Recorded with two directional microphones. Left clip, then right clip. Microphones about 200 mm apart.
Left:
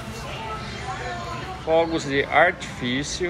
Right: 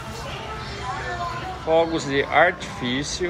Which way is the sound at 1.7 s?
15° right (ahead or behind).